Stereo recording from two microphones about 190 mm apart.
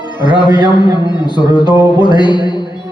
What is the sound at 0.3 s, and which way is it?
Speech, 25° left (ahead or behind).